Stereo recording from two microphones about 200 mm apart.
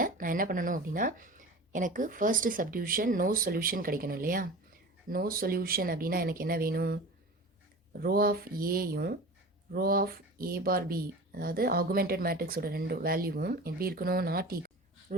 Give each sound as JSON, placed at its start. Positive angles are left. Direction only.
{"t": 0.0, "sound": "speech", "side_deg": -45}
{"t": 8.0, "sound": "speech", "side_deg": -50}